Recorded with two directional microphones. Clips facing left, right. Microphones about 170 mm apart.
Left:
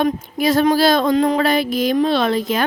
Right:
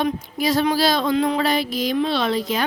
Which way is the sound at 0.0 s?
50° left (ahead or behind).